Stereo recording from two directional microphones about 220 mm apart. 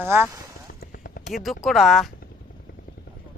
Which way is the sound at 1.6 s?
Centre (ahead or behind).